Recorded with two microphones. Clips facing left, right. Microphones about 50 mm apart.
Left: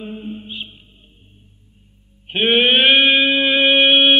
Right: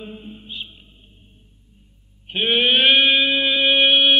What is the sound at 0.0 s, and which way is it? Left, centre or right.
Mantra, centre.